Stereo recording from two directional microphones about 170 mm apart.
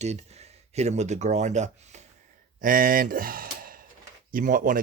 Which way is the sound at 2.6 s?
55° right (ahead or behind).